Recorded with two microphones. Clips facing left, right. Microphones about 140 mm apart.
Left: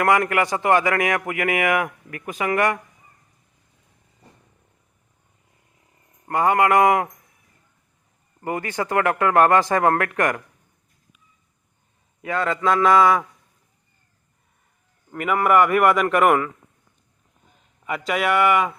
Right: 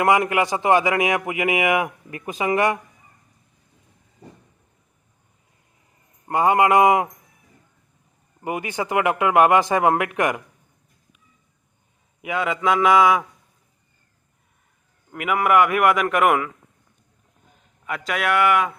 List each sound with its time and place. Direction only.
0.0 s a man's voice: 20° right (ahead or behind)
6.2 s a man's voice: 20° right (ahead or behind)
8.4 s speech: 15° right (ahead or behind)
12.2 s speech: 10° right (ahead or behind)
15.1 s a man's voice: 5° right (ahead or behind)
17.8 s a man's voice: centre (ahead or behind)